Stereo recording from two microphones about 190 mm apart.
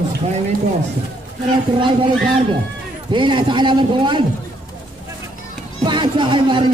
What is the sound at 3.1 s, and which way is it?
A man's voice, 25° right (ahead or behind).